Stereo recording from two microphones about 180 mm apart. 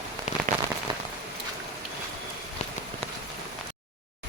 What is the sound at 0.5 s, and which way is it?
Rain on surface, 50° right (ahead or behind).